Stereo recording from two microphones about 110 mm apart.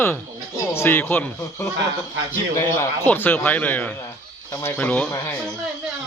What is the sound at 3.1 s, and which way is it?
Speech, 15° left (ahead or behind).